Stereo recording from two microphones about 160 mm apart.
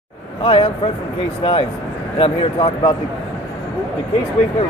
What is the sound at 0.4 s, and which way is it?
Speech, 35° left (ahead or behind).